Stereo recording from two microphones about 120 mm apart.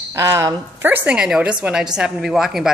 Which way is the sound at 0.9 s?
10° right (ahead or behind).